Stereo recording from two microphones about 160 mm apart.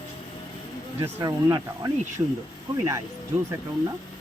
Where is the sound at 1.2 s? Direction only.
20° right (ahead or behind).